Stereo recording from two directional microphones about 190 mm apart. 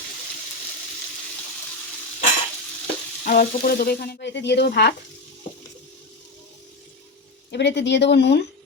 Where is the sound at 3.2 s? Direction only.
50° left (ahead or behind).